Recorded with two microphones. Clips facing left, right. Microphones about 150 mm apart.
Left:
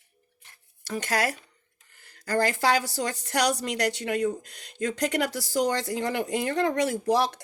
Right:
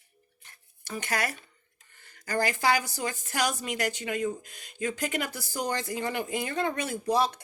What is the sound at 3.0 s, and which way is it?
Speech, 75° left (ahead or behind).